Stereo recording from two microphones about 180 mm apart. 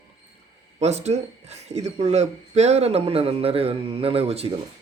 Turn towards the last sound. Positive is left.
turn(degrees=-35)  # may be behind; listen again after turning